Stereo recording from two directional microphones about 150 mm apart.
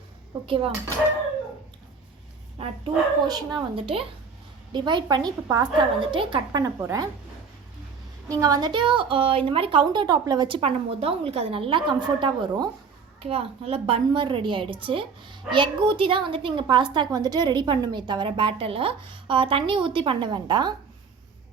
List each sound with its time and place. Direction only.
0.4 s a woman's voice: 35° right (ahead or behind)
2.6 s a woman's voice: 30° right (ahead or behind)
8.3 s a woman's voice: 25° right (ahead or behind)
10.6 s a woman's voice: 40° right (ahead or behind)
13.2 s a woman's voice: 40° right (ahead or behind)